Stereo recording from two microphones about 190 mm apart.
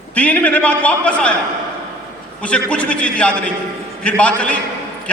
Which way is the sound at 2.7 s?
5° left (ahead or behind).